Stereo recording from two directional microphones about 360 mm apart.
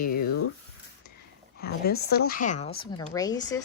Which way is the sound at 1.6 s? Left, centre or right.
Left.